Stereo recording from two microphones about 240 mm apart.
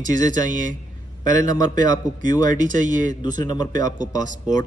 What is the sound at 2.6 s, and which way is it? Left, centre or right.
Speech, right.